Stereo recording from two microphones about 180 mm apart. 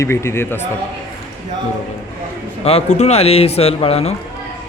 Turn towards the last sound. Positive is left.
turn(degrees=35)  # may be behind; listen again after turning